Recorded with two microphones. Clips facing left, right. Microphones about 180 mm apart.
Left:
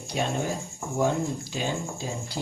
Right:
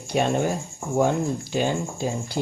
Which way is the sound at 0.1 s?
60° right (ahead or behind).